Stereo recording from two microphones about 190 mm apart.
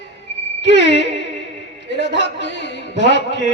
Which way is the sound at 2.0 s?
70° left (ahead or behind).